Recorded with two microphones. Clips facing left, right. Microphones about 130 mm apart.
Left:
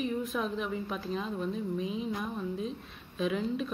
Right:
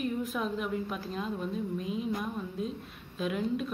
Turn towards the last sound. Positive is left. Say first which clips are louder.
# even
turn(degrees=-5)  # may be behind; listen again after turning